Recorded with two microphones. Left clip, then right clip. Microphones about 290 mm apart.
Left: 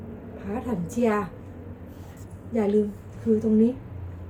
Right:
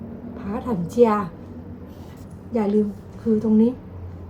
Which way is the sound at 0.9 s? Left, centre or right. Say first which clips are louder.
Right 8 dB; centre.